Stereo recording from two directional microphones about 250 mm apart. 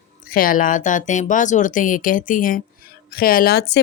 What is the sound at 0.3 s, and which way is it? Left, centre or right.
Speech, left.